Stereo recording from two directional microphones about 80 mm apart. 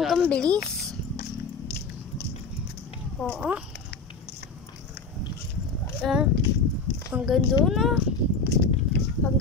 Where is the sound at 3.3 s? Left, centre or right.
Centre.